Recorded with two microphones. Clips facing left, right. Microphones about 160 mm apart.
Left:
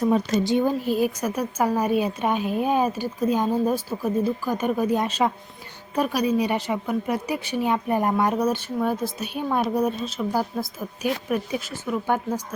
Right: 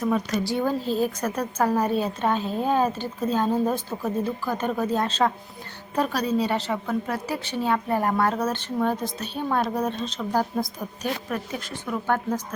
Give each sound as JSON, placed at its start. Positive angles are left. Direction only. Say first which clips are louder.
{"t": 0.1, "sound": "a woman's voice", "louder": "left 4 dB", "side_deg": 25}